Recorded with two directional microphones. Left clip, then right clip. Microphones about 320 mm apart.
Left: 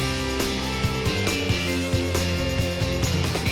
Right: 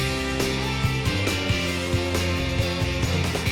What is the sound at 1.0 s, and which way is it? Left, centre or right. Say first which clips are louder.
Music: left 1 dB; centre.